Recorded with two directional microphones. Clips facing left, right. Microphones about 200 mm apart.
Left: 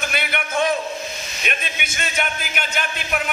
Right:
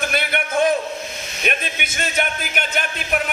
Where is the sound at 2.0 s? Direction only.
45° right (ahead or behind).